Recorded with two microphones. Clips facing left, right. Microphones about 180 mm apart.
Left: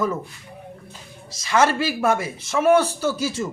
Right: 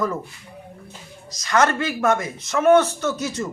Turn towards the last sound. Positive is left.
turn(degrees=30)  # may be behind; listen again after turning